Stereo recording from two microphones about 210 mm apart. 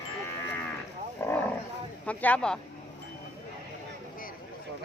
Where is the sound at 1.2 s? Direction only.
10° left (ahead or behind).